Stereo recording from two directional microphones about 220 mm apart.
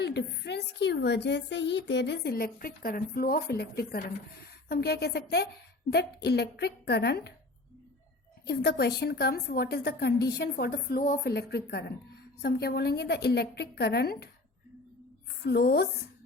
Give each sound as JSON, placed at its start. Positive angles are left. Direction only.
{"t": 0.0, "sound": "a woman's voice", "side_deg": 50}
{"t": 8.4, "sound": "a woman's voice", "side_deg": 45}
{"t": 15.4, "sound": "a woman's voice", "side_deg": 45}